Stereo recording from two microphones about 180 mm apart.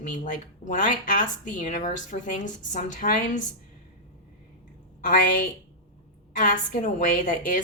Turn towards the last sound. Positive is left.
turn(degrees=45)  # may be behind; listen again after turning